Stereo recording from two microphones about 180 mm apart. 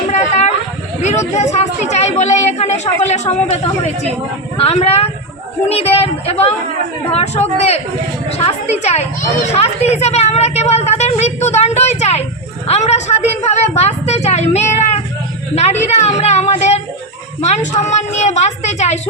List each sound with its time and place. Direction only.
0.1 s a sound: 40° left (ahead or behind)
1.3 s a woman's voice: 40° left (ahead or behind)
4.5 s a woman's voice: 35° left (ahead or behind)
8.8 s a woman's voice: 35° left (ahead or behind)